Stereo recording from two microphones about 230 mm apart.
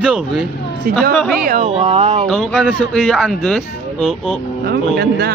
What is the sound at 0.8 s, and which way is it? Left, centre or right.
Speech, right.